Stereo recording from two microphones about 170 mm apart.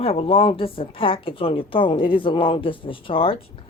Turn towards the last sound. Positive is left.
turn(degrees=35)  # may be behind; listen again after turning